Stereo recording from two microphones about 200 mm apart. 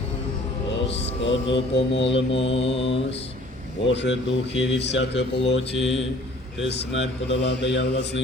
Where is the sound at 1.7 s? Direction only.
65° left (ahead or behind).